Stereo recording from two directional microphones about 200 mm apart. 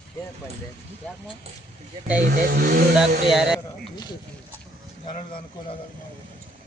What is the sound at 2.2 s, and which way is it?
Speech, 50° right (ahead or behind).